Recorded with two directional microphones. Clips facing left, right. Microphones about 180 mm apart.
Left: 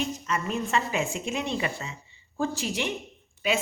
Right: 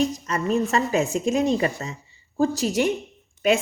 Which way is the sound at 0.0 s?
40° right (ahead or behind).